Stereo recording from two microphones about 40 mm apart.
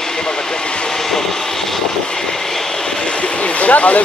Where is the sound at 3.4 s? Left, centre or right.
Left.